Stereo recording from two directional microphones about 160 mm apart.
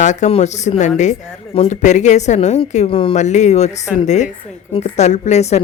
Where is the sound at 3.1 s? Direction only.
45° left (ahead or behind).